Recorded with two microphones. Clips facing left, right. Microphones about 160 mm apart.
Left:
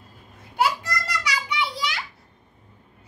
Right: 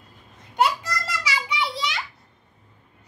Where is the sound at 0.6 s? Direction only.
Centre (ahead or behind).